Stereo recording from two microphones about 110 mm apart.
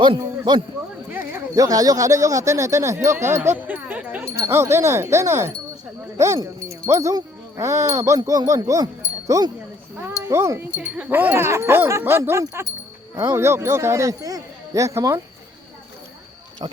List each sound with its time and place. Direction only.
1.5 s speech: 35° right (ahead or behind); by 4.2 s 15° right (ahead or behind)
4.3 s speech: 25° right (ahead or behind)
10.8 s speech: 10° right (ahead or behind)